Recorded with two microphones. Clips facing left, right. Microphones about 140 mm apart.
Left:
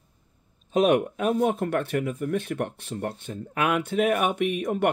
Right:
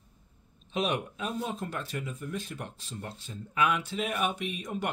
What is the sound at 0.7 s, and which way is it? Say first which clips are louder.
Speech: left 10 dB; 55° left (ahead or behind).